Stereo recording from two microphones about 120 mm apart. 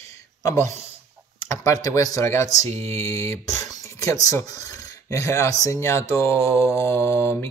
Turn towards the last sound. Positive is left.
turn(degrees=20)  # may be behind; listen again after turning